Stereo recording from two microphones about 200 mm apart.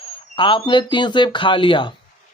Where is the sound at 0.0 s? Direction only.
25° left (ahead or behind).